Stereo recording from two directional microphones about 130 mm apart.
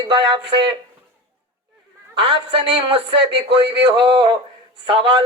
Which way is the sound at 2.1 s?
40° right (ahead or behind).